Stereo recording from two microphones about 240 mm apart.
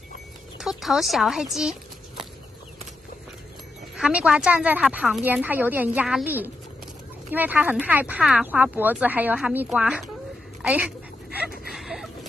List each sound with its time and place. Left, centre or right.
0.6 s speech: centre
3.9 s a woman's voice: centre
11.7 s a sound: centre